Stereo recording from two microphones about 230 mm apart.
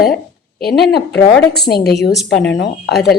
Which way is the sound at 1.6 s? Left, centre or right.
Left.